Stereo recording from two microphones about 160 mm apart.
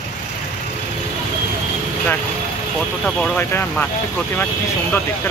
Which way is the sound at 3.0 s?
5° left (ahead or behind).